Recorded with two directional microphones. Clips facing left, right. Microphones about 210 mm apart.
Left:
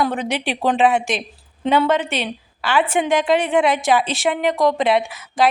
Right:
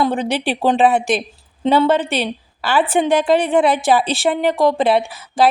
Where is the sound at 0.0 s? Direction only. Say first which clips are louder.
Right 3 dB; 30° right (ahead or behind).